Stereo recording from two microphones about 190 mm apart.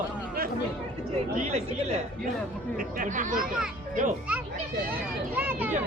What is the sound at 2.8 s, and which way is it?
Speech, 45° right (ahead or behind).